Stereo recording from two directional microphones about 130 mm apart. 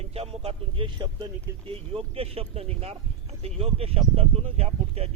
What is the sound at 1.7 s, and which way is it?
A man's voice, 50° right (ahead or behind).